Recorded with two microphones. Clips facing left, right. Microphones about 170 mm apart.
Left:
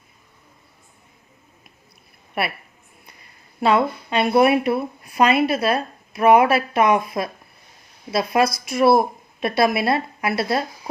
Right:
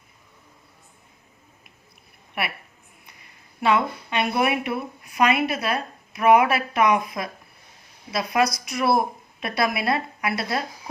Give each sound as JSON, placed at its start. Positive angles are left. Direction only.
{"t": 3.6, "sound": "a woman's voice", "side_deg": 35}